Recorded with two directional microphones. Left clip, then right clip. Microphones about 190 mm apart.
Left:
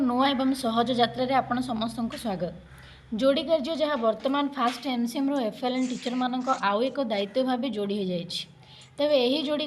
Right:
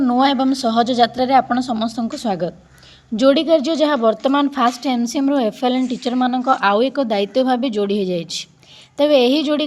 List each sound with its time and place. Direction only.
0.0 s a woman's voice: 30° right (ahead or behind)